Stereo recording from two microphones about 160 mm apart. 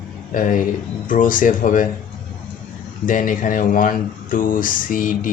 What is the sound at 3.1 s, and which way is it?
Speech, 55° left (ahead or behind).